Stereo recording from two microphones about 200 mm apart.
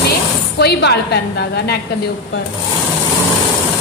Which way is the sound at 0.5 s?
55° left (ahead or behind).